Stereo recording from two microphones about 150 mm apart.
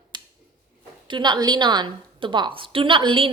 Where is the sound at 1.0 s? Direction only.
30° right (ahead or behind).